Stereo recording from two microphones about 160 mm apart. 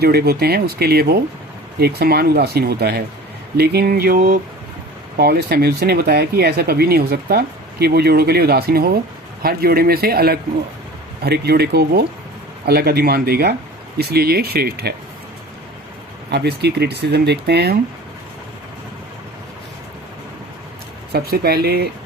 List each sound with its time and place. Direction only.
0.0 s a man's voice: 75° right (ahead or behind); by 4.4 s 60° right (ahead or behind)
5.1 s a man's voice: 80° right
11.2 s a man's voice: 85° right
16.3 s speech: 90° right
21.1 s speech: 75° right (ahead or behind)